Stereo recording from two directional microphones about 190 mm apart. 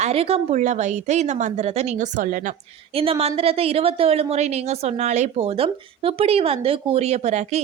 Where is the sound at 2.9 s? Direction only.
30° right (ahead or behind).